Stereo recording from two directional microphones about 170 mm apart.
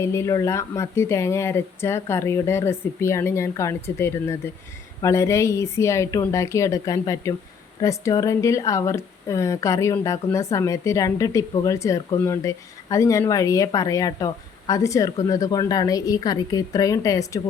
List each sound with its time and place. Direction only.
0.0 s speech: 15° left (ahead or behind)